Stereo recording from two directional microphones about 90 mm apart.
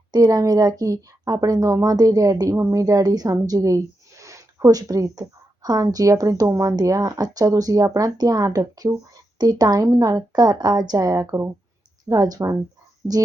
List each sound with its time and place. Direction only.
0.1 s a woman's voice: 40° right (ahead or behind)
12.0 s a woman's voice: 45° right (ahead or behind)